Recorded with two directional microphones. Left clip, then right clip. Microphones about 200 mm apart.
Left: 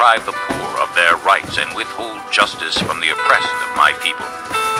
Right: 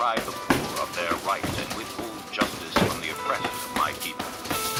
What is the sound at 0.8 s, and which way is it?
Speech, 35° left (ahead or behind).